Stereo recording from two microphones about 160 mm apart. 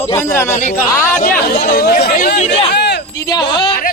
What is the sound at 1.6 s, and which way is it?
Speech, 65° left (ahead or behind).